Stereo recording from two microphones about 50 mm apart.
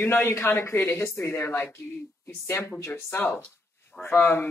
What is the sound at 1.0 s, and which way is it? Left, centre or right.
Speech, left.